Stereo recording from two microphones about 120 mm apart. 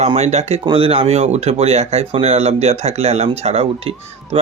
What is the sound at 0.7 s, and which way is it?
Speech, 55° right (ahead or behind).